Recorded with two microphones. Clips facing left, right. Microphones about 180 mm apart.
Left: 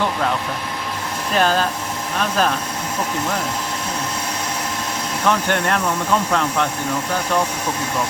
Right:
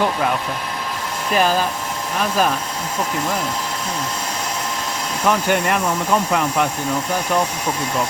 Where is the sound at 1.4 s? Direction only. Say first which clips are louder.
Even; 5° right (ahead or behind).